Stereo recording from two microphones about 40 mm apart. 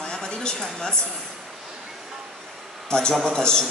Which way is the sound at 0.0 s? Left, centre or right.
Centre.